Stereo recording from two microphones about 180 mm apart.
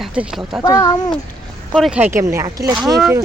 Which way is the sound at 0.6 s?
20° left (ahead or behind).